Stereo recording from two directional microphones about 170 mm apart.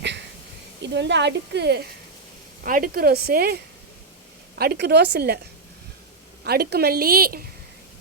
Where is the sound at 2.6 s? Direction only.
55° right (ahead or behind).